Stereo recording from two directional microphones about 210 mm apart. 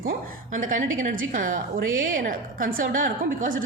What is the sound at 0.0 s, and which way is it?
A woman's voice, 40° right (ahead or behind).